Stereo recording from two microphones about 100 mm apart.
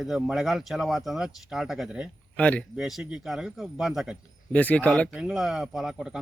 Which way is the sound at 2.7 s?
5° right (ahead or behind).